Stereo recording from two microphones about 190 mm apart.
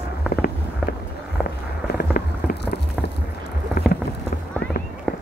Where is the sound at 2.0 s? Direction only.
50° left (ahead or behind).